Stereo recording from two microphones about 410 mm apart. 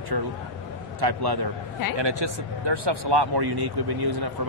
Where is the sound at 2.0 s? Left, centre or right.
Right.